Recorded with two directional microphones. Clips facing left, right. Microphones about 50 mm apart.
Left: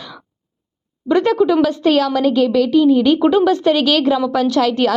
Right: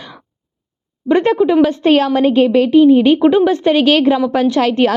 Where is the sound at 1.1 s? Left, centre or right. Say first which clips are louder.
Right 2 dB; right.